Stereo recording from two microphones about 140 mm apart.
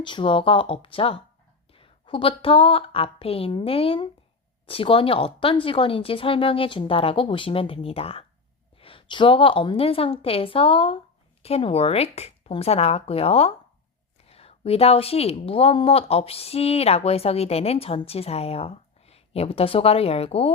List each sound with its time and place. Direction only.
0.0 s a woman's voice: 35° left (ahead or behind)